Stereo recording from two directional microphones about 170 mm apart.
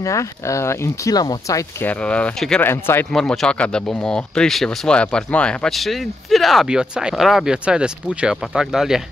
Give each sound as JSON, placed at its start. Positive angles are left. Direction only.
{"t": 0.0, "sound": "speech", "side_deg": 20}
{"t": 3.1, "sound": "speech", "side_deg": 0}